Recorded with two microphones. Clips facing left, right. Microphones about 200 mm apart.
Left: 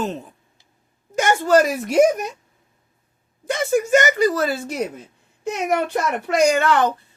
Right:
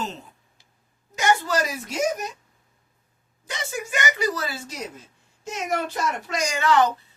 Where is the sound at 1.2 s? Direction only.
50° left (ahead or behind).